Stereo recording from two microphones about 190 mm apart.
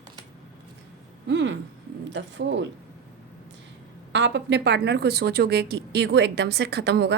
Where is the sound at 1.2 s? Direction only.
70° right (ahead or behind).